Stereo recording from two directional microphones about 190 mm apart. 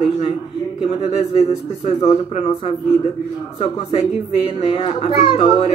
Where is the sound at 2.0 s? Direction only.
30° left (ahead or behind).